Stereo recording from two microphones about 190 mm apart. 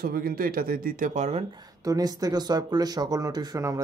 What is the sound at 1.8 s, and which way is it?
Speech, 20° right (ahead or behind).